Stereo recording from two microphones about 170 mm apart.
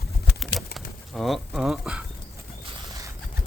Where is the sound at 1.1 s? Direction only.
Centre (ahead or behind).